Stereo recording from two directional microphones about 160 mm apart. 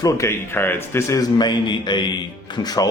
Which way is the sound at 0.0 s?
15° left (ahead or behind).